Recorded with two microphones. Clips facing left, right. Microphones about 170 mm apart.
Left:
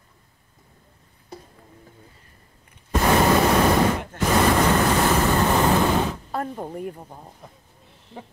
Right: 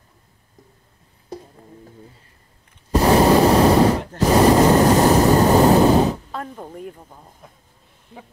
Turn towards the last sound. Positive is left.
turn(degrees=5)  # may be behind; listen again after turning